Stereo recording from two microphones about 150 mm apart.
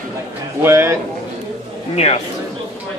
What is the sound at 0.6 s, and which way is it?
Speech, 15° right (ahead or behind).